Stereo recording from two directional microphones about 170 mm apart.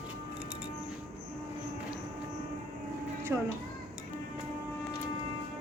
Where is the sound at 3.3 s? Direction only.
10° right (ahead or behind).